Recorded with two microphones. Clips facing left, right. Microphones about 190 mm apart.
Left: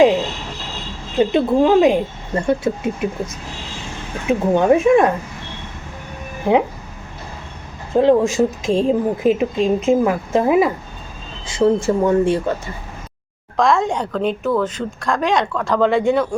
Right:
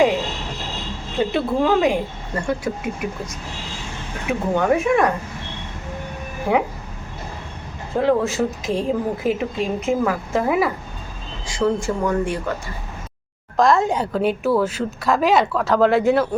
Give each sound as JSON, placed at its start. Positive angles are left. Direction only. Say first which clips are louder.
{"t": 1.2, "sound": "speech", "louder": "left 5 dB", "side_deg": 20}
{"t": 4.3, "sound": "speech", "louder": "left 5 dB", "side_deg": 20}
{"t": 6.5, "sound": "speech", "louder": "left 4 dB", "side_deg": 20}
{"t": 7.9, "sound": "speech", "louder": "left 5 dB", "side_deg": 20}
{"t": 13.6, "sound": "a woman's voice", "louder": "even", "side_deg": 0}